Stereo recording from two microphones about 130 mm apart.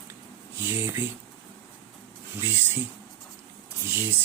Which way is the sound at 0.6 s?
15° right (ahead or behind).